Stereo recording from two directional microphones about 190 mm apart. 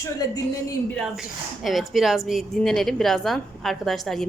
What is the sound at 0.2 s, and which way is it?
Speech, 20° left (ahead or behind).